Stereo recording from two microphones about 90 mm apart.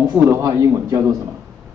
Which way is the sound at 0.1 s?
30° right (ahead or behind).